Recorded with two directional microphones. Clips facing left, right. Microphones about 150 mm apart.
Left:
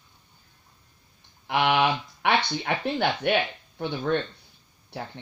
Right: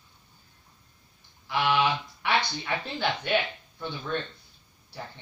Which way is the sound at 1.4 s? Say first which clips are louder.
Left 3 dB; 60° left (ahead or behind).